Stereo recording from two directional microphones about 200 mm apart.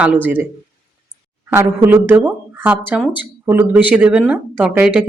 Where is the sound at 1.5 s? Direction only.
10° right (ahead or behind).